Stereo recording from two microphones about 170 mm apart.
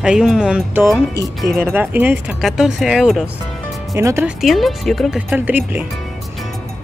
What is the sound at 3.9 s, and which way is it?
Speech, 15° right (ahead or behind).